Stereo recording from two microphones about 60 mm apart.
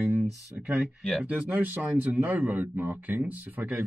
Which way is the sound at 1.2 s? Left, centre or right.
Right.